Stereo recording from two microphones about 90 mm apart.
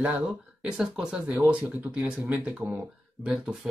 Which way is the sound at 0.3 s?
5° right (ahead or behind).